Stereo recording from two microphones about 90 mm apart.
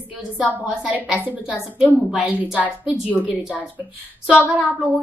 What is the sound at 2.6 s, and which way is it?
A woman's voice, 15° right (ahead or behind).